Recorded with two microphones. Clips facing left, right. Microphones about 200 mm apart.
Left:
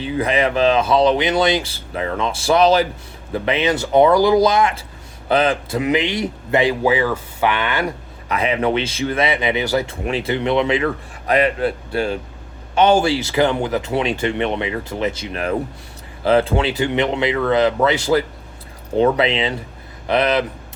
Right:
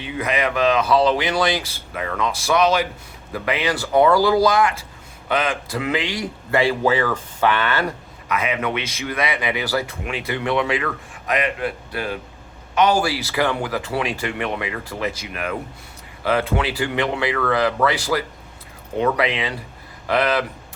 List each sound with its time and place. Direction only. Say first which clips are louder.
0.0 s speech: left 4 dB; 30° left (ahead or behind)
8.3 s speech: left 4 dB; 30° left (ahead or behind)
10.0 s speech: left 5 dB; 30° left (ahead or behind)